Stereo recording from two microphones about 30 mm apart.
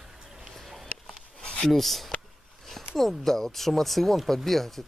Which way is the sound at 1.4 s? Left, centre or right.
Left.